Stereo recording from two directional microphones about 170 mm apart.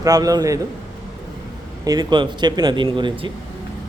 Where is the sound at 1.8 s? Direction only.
25° right (ahead or behind).